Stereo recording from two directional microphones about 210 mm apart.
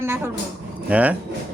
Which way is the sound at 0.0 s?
10° right (ahead or behind).